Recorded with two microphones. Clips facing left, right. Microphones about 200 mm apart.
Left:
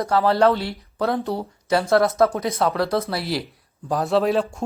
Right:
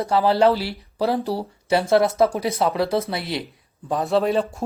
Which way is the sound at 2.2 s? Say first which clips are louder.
Even; 10° right (ahead or behind).